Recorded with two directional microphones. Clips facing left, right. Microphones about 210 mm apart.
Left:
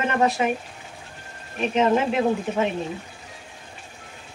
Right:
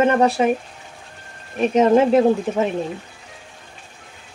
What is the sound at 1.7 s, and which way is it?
Speech, 40° right (ahead or behind).